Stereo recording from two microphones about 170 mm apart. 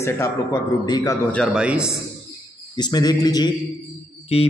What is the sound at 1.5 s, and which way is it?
Speech, 5° right (ahead or behind).